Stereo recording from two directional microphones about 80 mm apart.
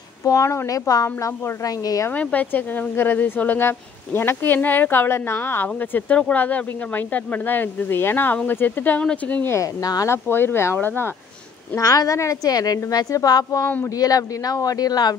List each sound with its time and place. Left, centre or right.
0.2 s a woman's voice: left
2.0 s speech: left
10.0 s speech: left
11.8 s a woman's voice: left